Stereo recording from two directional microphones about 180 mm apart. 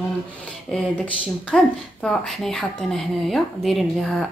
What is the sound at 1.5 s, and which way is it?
Speech, centre (ahead or behind).